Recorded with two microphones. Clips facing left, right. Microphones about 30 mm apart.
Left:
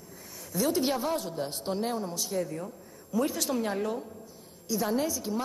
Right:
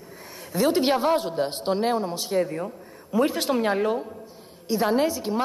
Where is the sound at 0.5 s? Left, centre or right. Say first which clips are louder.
Right 6 dB; right.